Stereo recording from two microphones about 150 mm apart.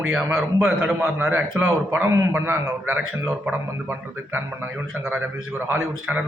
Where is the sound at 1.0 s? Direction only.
15° right (ahead or behind).